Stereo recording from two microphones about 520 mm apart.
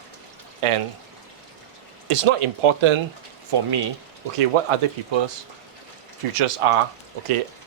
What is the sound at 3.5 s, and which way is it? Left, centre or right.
Speech, right.